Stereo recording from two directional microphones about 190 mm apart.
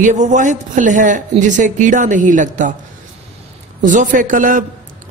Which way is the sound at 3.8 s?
45° right (ahead or behind).